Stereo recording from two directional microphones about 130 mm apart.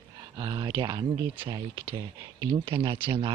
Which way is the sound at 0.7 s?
30° right (ahead or behind).